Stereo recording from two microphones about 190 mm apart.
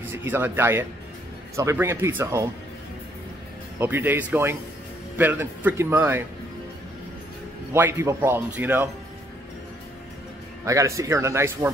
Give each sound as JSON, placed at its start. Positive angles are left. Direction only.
{"t": 0.1, "sound": "speech", "side_deg": -10}
{"t": 3.8, "sound": "speech", "side_deg": -10}
{"t": 7.7, "sound": "speech", "side_deg": -15}
{"t": 10.6, "sound": "speech", "side_deg": -15}